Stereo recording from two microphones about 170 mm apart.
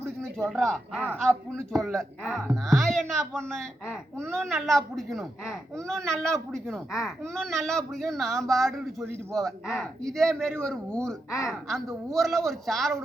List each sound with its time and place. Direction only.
0.2 s speech: 5° left (ahead or behind)